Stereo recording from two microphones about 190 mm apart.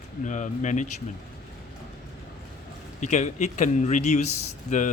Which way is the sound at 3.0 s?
40° left (ahead or behind).